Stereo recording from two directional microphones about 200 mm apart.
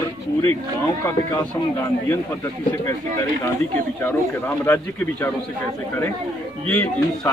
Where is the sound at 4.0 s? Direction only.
10° left (ahead or behind).